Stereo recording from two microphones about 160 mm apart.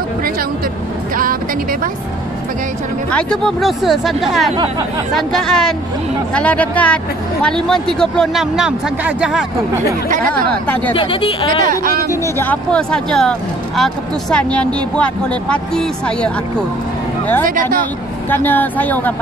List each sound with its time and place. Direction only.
1.1 s speech: 60° right (ahead or behind)
3.1 s speech: 5° left (ahead or behind)
10.9 s speech: 35° left (ahead or behind)
11.6 s speech: 65° right (ahead or behind)
12.1 s speech: 15° left (ahead or behind)
17.5 s speech: 60° right (ahead or behind)
18.3 s speech: 10° left (ahead or behind)